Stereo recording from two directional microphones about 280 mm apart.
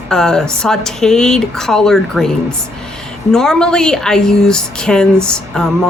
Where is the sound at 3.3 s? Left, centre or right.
Centre.